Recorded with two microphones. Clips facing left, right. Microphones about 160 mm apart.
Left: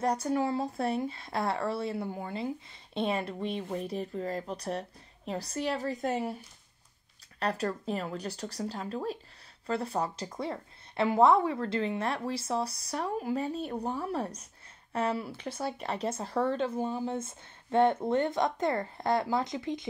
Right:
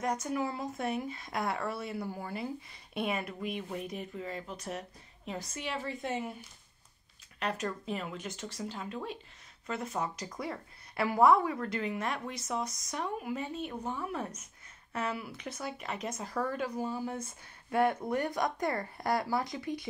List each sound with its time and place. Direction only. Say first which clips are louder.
0.0 s speech: left 4 dB; 35° left (ahead or behind)
7.3 s a woman's voice: left 4 dB; 35° left (ahead or behind)